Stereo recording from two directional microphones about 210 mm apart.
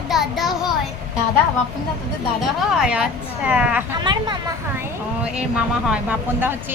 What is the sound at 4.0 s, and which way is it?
Speech, 20° right (ahead or behind).